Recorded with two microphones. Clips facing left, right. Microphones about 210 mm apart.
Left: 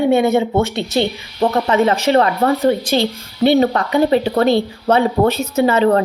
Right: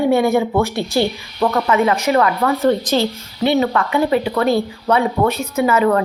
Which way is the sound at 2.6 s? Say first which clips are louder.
Even; 15° left (ahead or behind).